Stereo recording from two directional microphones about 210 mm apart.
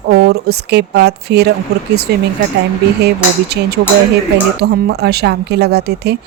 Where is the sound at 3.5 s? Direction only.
50° right (ahead or behind).